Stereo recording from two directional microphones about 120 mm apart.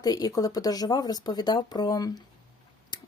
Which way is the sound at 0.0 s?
35° left (ahead or behind).